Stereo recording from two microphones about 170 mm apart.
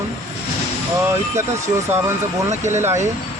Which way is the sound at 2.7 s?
15° right (ahead or behind).